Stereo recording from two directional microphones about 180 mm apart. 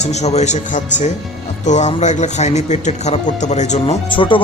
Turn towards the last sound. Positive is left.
turn(degrees=30)  # may be behind; listen again after turning